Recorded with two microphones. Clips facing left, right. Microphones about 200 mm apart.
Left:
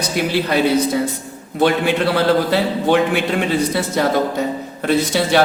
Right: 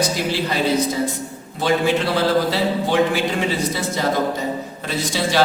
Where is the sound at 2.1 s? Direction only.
60° left (ahead or behind).